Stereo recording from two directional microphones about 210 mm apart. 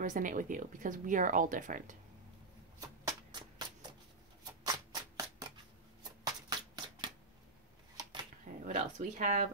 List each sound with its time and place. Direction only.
0.0 s speech: 40° right (ahead or behind)
3.3 s a sound: 20° right (ahead or behind)
6.2 s shuffling cards: 20° right (ahead or behind)
8.6 s speech: 35° right (ahead or behind)